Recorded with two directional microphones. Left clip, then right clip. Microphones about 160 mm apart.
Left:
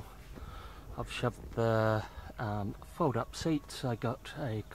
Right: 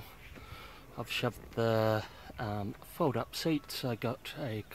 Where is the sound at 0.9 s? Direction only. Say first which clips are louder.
Right 1 dB; 20° right (ahead or behind).